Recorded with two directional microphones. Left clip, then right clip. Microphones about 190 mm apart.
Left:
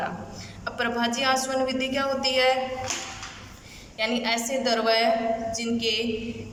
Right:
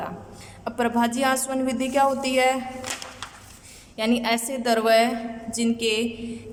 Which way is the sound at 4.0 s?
40° right (ahead or behind).